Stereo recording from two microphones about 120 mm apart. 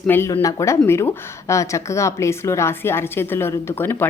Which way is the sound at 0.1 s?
15° left (ahead or behind).